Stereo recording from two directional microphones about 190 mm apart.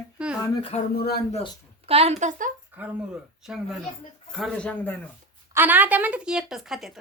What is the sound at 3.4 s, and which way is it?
A woman's voice, centre (ahead or behind).